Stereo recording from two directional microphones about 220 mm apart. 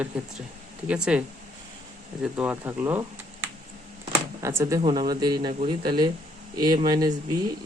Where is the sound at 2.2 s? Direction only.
5° right (ahead or behind).